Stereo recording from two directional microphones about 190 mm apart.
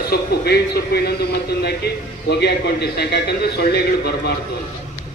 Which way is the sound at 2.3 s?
60° left (ahead or behind).